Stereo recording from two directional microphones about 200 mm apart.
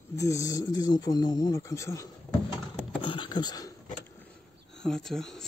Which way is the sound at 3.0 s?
25° left (ahead or behind).